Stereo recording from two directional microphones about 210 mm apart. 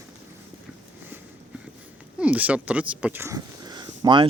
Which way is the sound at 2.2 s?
5° right (ahead or behind).